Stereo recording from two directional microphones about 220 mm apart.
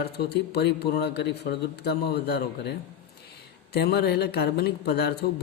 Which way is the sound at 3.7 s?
45° left (ahead or behind).